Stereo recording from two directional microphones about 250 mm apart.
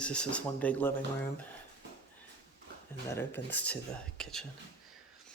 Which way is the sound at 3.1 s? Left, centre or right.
Centre.